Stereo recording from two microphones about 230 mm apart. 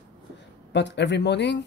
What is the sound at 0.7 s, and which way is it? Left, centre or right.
Speech, left.